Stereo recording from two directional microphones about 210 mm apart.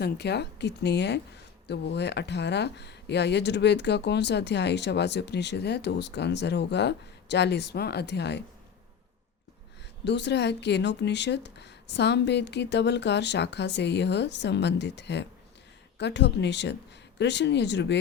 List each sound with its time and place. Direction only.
0.0 s a woman's voice: 50° left (ahead or behind)
10.0 s speech: 55° left (ahead or behind)